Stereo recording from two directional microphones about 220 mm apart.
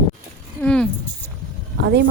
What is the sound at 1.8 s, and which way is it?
Speech, 50° right (ahead or behind).